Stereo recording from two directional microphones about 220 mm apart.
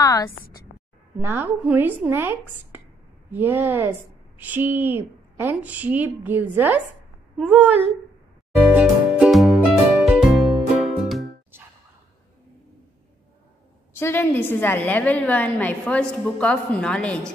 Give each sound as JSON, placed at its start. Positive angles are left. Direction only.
{"t": 0.0, "sound": "a woman's voice", "side_deg": 15}
{"t": 1.2, "sound": "a woman's voice", "side_deg": -10}
{"t": 8.6, "sound": "music", "side_deg": -5}
{"t": 13.9, "sound": "a woman's voice", "side_deg": 10}